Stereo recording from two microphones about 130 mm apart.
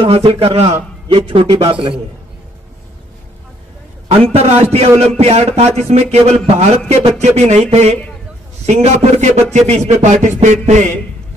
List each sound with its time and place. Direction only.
0.0 s a man's voice: 45° right (ahead or behind)
4.2 s a man's voice: 50° right (ahead or behind)